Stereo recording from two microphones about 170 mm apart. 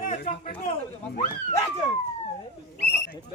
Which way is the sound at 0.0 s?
45° left (ahead or behind).